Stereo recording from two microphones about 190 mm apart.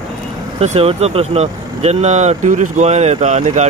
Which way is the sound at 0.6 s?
30° right (ahead or behind).